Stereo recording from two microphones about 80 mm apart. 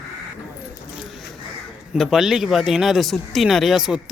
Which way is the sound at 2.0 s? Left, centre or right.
Centre.